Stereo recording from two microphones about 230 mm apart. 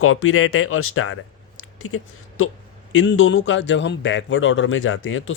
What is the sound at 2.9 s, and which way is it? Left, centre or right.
A man's voice, left.